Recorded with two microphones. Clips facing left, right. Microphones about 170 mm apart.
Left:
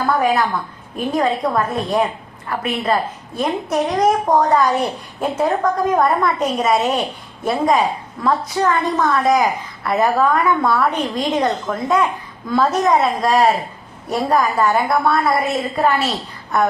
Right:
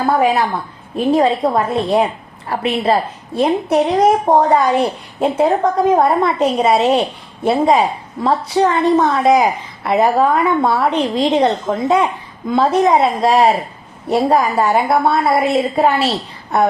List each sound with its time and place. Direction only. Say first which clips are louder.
0.0 s a woman's voice: right 3 dB; 30° right (ahead or behind)